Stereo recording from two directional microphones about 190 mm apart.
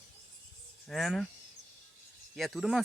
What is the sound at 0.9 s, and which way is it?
Speech, centre (ahead or behind).